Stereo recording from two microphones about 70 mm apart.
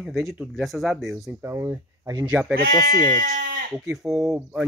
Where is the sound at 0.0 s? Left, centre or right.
Centre.